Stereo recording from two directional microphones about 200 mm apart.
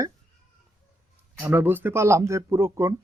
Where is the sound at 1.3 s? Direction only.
10° right (ahead or behind).